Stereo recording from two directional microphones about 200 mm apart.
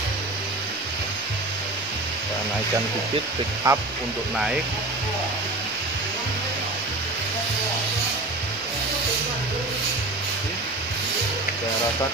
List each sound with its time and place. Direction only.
3.7 s speech: 20° right (ahead or behind)